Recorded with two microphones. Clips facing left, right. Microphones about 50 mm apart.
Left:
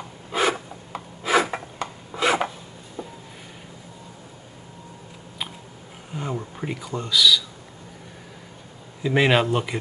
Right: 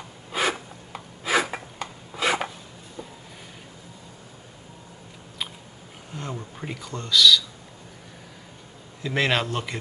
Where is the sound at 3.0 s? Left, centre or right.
Centre.